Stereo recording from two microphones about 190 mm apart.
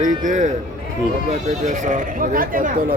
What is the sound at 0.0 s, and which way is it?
Speech, 40° right (ahead or behind).